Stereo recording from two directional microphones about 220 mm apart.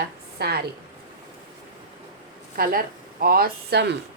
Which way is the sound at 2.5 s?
40° right (ahead or behind).